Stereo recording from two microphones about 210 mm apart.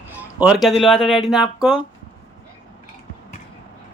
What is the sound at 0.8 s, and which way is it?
Speech, centre (ahead or behind).